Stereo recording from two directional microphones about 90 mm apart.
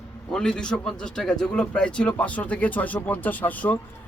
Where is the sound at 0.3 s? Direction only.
10° left (ahead or behind).